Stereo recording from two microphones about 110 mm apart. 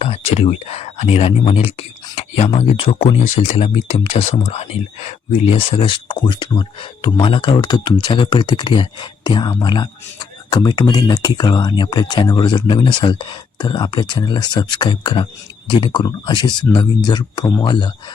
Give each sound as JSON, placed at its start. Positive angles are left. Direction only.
{"t": 0.0, "sound": "speech", "side_deg": 65}
{"t": 2.1, "sound": "a sound", "side_deg": 75}
{"t": 2.6, "sound": "speech", "side_deg": 60}